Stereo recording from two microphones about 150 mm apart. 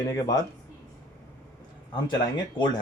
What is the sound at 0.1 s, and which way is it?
Speech, 25° left (ahead or behind).